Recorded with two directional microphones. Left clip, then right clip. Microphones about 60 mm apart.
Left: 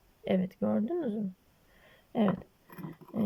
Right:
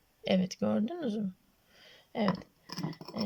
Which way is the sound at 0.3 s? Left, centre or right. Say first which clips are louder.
Even; centre.